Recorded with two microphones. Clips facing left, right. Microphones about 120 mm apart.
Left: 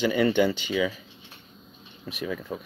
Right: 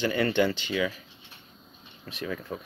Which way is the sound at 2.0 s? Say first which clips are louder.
Left 2 dB; 5° left (ahead or behind).